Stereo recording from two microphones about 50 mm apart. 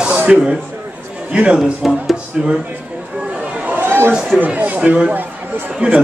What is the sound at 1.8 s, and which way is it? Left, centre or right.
Speech, centre.